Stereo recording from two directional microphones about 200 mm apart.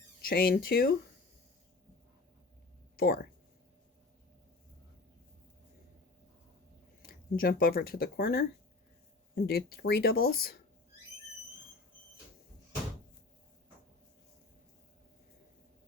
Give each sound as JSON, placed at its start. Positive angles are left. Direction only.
{"t": 0.2, "sound": "speech", "side_deg": 50}
{"t": 2.9, "sound": "speech", "side_deg": 50}
{"t": 7.0, "sound": "speech", "side_deg": 45}